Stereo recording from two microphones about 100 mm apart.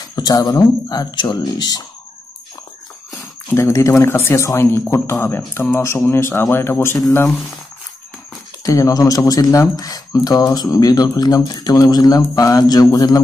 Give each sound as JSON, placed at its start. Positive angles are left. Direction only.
{"t": 0.0, "sound": "speech", "side_deg": 40}
{"t": 3.1, "sound": "a sound", "side_deg": 30}
{"t": 4.0, "sound": "speech", "side_deg": 25}
{"t": 8.6, "sound": "speech", "side_deg": 35}